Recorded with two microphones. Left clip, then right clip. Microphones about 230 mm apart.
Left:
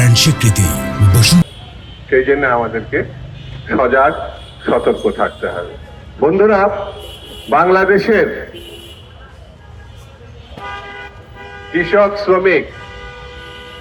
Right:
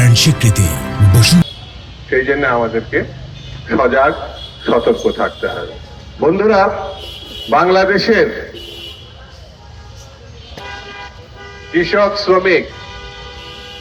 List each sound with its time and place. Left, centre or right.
0.0 s speech: centre
2.0 s a man's voice: left
11.7 s a man's voice: left